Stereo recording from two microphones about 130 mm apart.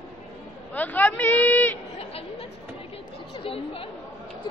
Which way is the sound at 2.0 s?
50° left (ahead or behind).